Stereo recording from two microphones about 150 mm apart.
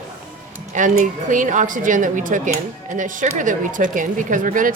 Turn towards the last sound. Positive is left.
turn(degrees=-60)  # may be behind; listen again after turning